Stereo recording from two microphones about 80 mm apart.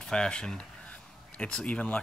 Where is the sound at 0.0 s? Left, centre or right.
Centre.